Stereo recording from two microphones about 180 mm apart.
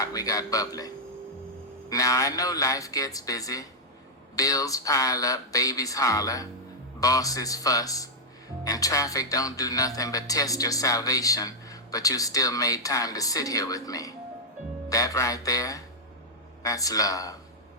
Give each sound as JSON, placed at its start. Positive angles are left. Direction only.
{"t": 0.0, "sound": "speech", "side_deg": 20}